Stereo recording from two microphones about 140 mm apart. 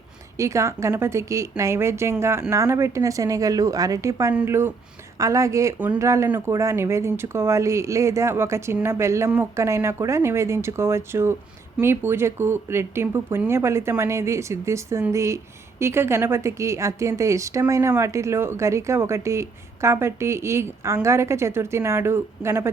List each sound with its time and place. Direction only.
0.3 s a woman's voice: 20° right (ahead or behind)